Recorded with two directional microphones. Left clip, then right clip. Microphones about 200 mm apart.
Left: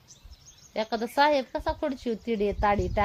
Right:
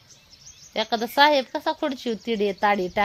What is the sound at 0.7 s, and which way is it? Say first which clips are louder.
A woman's voice: right 5 dB; 40° right (ahead or behind).